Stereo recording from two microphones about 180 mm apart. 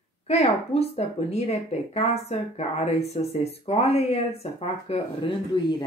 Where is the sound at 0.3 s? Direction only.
35° left (ahead or behind).